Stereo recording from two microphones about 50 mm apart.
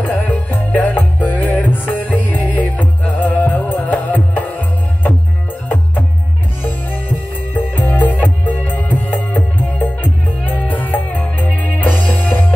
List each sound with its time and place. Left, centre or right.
0.0 s music: left
7.5 s music: left